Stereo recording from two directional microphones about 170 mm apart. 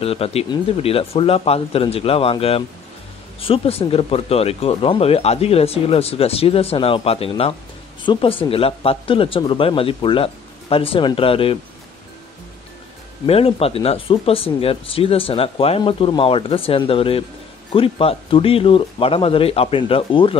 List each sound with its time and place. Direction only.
0.0 s speech: 35° left (ahead or behind)
13.3 s speech: 35° left (ahead or behind)